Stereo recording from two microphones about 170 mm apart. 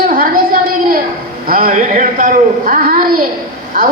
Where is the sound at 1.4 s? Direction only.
60° right (ahead or behind).